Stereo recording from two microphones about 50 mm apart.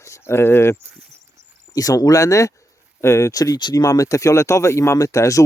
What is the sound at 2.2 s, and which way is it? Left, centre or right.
Speech, left.